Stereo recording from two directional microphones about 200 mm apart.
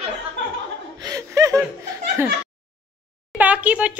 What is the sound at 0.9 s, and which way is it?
Chuckle, 20° right (ahead or behind).